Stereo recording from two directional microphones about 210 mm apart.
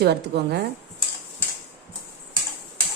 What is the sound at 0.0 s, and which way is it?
Speech, 50° right (ahead or behind).